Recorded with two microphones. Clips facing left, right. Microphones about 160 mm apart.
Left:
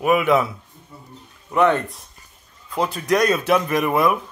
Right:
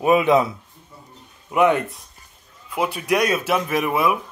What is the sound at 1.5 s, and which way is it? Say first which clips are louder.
Speech: even; 10° right (ahead or behind).